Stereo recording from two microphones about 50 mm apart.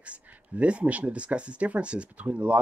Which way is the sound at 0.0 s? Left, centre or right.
Right.